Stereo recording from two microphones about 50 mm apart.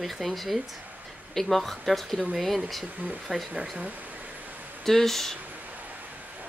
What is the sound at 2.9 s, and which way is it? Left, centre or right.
Speech, right.